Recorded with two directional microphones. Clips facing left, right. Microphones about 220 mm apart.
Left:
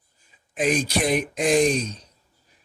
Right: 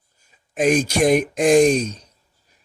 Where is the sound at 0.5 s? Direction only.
45° right (ahead or behind).